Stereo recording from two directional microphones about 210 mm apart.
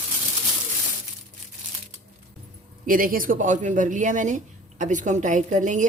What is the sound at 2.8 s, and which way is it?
A man's voice, 40° right (ahead or behind).